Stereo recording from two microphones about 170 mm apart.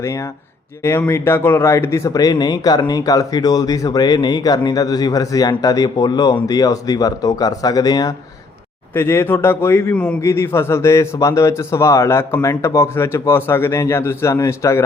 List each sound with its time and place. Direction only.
0.9 s a man's voice: 15° left (ahead or behind)